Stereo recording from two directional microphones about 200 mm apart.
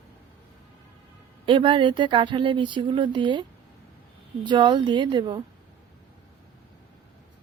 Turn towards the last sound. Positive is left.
turn(degrees=-25)  # may be behind; listen again after turning